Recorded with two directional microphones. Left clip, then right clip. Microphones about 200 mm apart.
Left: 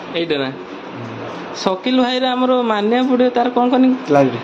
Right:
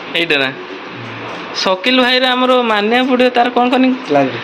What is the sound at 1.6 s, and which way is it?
A man's voice, 5° left (ahead or behind).